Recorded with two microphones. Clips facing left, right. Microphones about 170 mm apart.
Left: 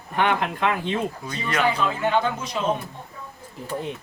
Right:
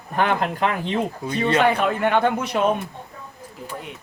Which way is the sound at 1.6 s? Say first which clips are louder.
Left 1 dB; 60° right (ahead or behind).